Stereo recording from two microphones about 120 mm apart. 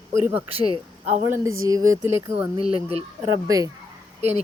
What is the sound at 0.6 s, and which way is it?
Speech, 60° right (ahead or behind).